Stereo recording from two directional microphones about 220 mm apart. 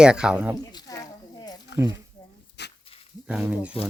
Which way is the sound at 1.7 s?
50° left (ahead or behind).